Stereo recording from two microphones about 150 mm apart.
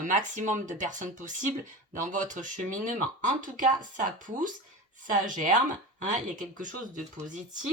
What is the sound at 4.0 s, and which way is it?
Speech, 65° right (ahead or behind).